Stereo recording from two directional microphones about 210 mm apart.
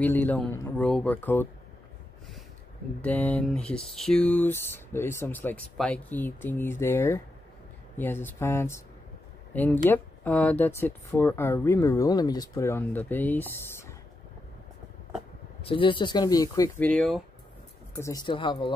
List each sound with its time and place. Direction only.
0.0 s speech: 10° left (ahead or behind)
3.0 s speech: 10° left (ahead or behind)
15.6 s speech: 25° left (ahead or behind); by 17.2 s 5° left (ahead or behind)
17.9 s speech: 15° left (ahead or behind)